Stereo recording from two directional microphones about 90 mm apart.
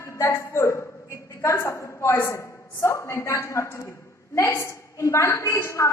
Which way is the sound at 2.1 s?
30° left (ahead or behind).